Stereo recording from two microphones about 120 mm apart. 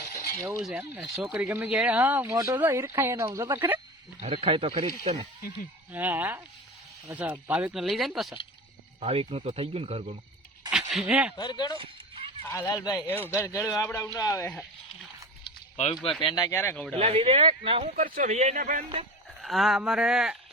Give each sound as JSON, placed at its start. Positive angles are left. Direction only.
{"t": 0.6, "sound": "speech", "side_deg": -10}
{"t": 4.2, "sound": "speech", "side_deg": -55}
{"t": 5.9, "sound": "speech", "side_deg": -15}
{"t": 9.0, "sound": "speech", "side_deg": -55}
{"t": 10.7, "sound": "speech", "side_deg": -5}
{"t": 11.3, "sound": "speech", "side_deg": 35}
{"t": 13.2, "sound": "speech", "side_deg": 20}
{"t": 16.0, "sound": "speech", "side_deg": 0}
{"t": 16.2, "sound": "speech", "side_deg": 35}
{"t": 16.6, "sound": "speech", "side_deg": 20}
{"t": 16.9, "sound": "speech", "side_deg": -55}
{"t": 17.9, "sound": "a man's voice", "side_deg": -80}
{"t": 19.4, "sound": "speech", "side_deg": 0}